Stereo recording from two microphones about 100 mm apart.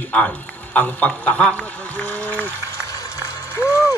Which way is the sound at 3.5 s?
30° left (ahead or behind).